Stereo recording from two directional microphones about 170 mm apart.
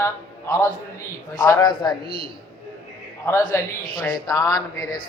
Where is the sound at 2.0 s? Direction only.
60° left (ahead or behind).